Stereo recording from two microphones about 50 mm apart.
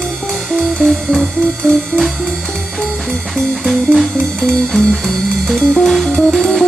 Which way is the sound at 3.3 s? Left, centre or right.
Centre.